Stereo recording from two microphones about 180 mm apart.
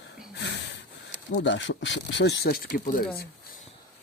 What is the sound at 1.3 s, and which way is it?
Speech, 85° left.